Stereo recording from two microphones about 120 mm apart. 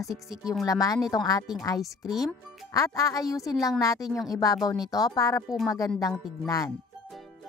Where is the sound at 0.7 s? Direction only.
30° left (ahead or behind).